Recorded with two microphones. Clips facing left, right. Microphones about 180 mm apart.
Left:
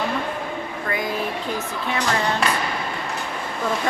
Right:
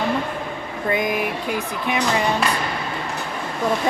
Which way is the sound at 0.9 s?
20° right (ahead or behind).